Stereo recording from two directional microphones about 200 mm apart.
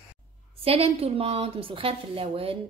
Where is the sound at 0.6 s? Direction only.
30° right (ahead or behind).